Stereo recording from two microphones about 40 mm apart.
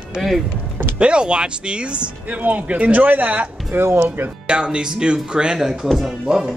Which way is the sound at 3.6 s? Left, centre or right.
Right.